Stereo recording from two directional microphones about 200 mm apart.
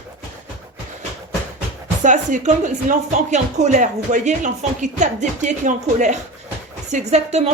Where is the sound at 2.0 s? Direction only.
40° right (ahead or behind).